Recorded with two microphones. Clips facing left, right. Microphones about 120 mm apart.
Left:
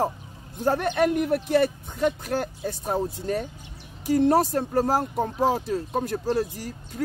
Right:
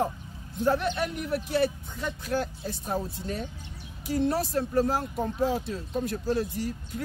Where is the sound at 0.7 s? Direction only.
50° left (ahead or behind).